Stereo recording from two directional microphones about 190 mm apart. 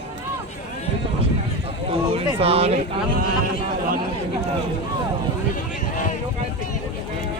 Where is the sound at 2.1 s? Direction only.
30° right (ahead or behind).